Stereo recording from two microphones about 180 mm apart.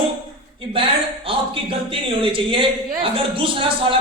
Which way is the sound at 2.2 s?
30° right (ahead or behind).